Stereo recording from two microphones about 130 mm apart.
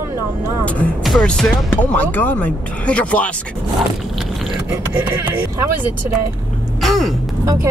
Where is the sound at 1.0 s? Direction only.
5° left (ahead or behind).